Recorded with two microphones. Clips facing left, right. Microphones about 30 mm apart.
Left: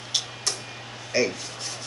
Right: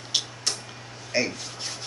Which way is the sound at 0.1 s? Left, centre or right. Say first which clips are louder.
Right 1 dB; centre.